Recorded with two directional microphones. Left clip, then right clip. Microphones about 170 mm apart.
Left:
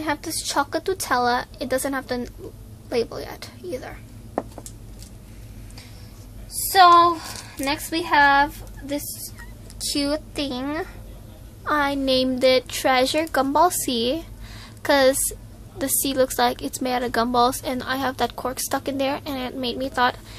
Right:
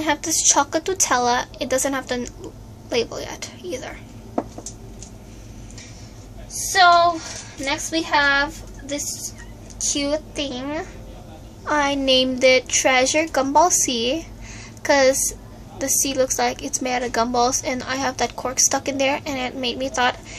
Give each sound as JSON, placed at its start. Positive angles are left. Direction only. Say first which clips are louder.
{"t": 0.0, "sound": "a woman's voice", "louder": "right 6 dB", "side_deg": 15}
{"t": 7.6, "sound": "a woman's voice", "louder": "right 2 dB", "side_deg": 20}